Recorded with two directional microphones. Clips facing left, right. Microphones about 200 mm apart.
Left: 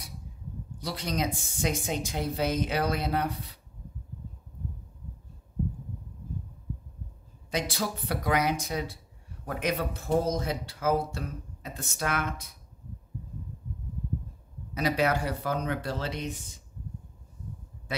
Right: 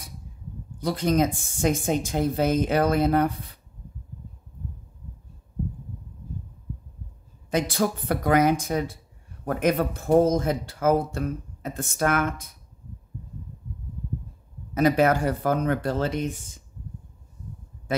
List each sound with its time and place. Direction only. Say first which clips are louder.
0.7 s speech: right 9 dB; 50° right (ahead or behind)
7.5 s speech: right 7 dB; 50° right (ahead or behind)
14.7 s speech: right 7 dB; 50° right (ahead or behind)